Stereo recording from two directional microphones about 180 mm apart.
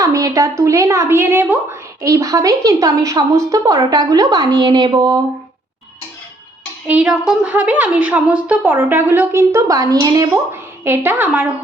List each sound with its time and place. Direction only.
0.0 s a woman's voice: 20° right (ahead or behind)
6.8 s a woman's voice: 5° right (ahead or behind)